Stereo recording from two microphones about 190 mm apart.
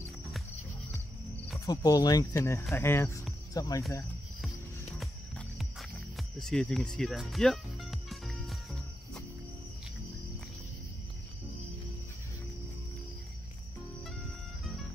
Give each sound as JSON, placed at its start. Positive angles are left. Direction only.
{"t": 1.7, "sound": "speech", "side_deg": 20}
{"t": 4.9, "sound": "music", "side_deg": 5}